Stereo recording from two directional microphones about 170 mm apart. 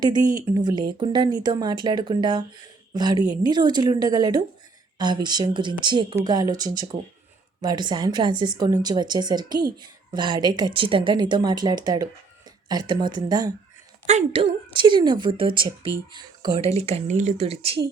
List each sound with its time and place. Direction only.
0.0 s a woman's voice: 25° right (ahead or behind)
14.1 s a woman's voice: 40° right (ahead or behind)